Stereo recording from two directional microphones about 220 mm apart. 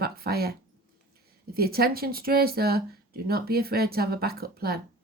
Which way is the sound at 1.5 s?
45° right (ahead or behind).